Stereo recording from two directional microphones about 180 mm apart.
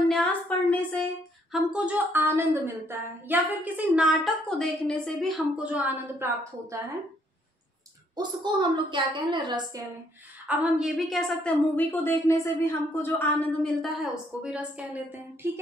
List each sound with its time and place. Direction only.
0.1 s a woman's voice: 5° left (ahead or behind)
1.5 s a woman's voice: 5° right (ahead or behind)
5.6 s a woman's voice: 5° right (ahead or behind)
8.2 s a woman's voice: 25° right (ahead or behind)
10.4 s a woman's voice: 5° right (ahead or behind)